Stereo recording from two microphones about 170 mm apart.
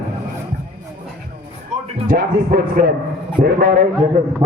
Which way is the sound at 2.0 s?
65° right (ahead or behind).